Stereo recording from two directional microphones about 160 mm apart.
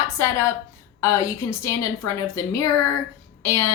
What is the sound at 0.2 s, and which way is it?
A woman's voice, 20° left (ahead or behind).